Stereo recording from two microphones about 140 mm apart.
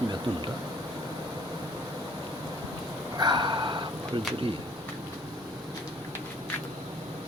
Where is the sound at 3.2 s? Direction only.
30° right (ahead or behind).